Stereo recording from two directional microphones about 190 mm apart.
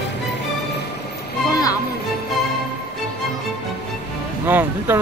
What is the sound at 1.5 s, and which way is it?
Speech, 20° left (ahead or behind).